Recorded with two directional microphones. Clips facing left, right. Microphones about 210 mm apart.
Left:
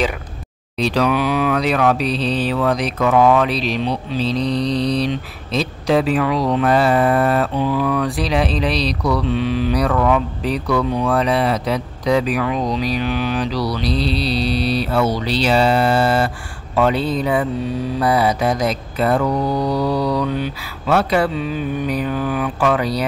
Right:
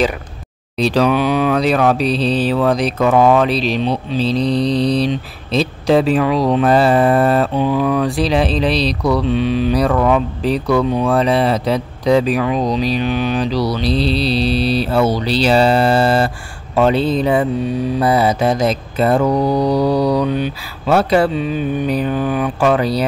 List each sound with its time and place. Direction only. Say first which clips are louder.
0.7 s mantra: right 3 dB; 35° right (ahead or behind)